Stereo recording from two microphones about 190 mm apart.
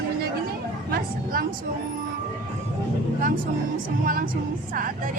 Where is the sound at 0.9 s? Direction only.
50° right (ahead or behind).